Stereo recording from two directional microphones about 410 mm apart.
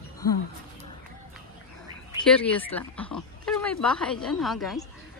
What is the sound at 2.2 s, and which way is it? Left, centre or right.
Speech, centre.